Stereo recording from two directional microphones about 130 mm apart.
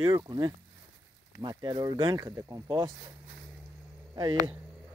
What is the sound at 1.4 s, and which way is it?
Speech, 35° right (ahead or behind).